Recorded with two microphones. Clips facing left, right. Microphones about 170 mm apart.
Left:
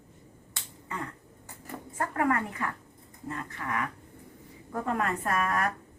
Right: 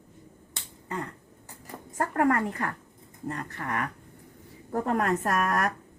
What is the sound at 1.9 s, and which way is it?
A woman's voice, 40° right (ahead or behind).